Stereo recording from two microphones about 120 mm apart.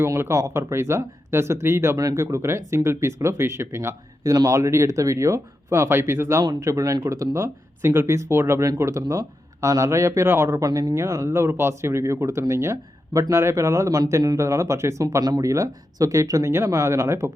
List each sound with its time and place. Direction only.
0.0 s speech: 25° right (ahead or behind)